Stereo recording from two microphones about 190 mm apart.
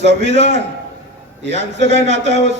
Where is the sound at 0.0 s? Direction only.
65° right (ahead or behind).